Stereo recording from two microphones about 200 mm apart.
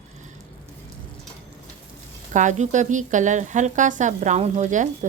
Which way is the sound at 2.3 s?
35° right (ahead or behind).